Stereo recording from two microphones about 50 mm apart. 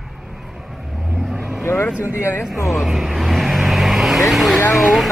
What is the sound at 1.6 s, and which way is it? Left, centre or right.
Vehicle, left.